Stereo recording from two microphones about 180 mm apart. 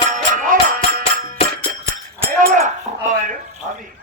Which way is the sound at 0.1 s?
45° right (ahead or behind).